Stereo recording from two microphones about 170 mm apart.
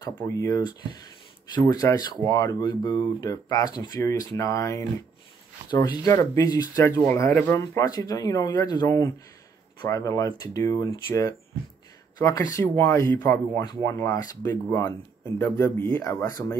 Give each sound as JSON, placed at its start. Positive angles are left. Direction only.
{"t": 0.0, "sound": "speech", "side_deg": 20}